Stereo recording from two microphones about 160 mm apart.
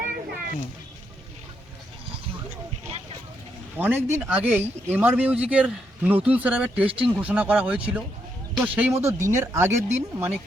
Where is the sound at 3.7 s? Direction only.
15° right (ahead or behind).